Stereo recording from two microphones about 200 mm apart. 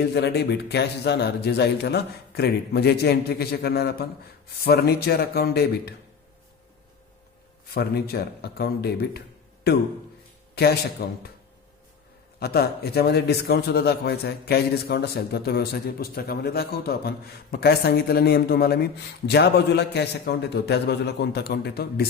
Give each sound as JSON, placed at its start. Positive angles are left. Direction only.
{"t": 0.0, "sound": "a man's voice", "side_deg": 55}
{"t": 7.7, "sound": "a man's voice", "side_deg": 50}
{"t": 12.4, "sound": "a man's voice", "side_deg": 50}